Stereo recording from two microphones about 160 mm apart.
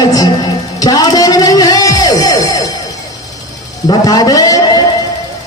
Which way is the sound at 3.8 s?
25° left (ahead or behind).